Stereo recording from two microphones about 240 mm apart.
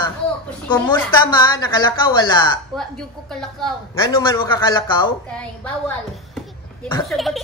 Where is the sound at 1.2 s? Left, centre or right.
Centre.